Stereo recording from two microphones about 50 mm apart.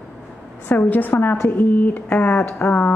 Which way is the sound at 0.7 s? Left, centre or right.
Left.